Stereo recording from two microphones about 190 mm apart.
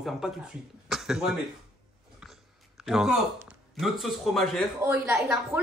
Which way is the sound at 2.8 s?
5° right (ahead or behind).